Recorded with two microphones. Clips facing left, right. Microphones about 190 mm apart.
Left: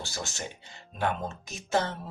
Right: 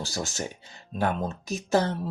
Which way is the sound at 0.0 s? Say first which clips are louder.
Right 5 dB; 40° right (ahead or behind).